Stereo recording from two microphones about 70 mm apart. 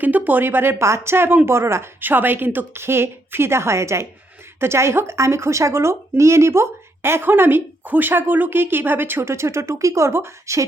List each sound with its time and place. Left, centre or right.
0.0 s speech: right